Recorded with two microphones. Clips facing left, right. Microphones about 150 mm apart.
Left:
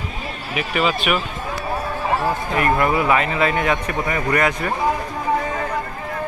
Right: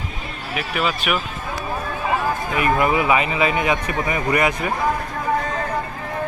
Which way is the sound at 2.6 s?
10° right (ahead or behind).